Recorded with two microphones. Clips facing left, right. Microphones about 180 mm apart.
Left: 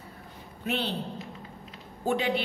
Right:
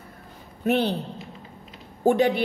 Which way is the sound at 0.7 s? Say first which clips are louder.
Right 9 dB; 45° right (ahead or behind).